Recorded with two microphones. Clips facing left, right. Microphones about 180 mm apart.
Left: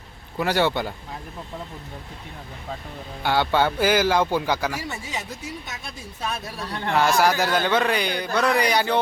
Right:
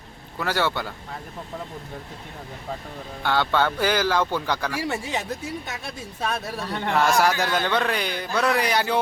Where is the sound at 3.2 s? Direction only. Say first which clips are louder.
Left 1 dB; 10° left (ahead or behind).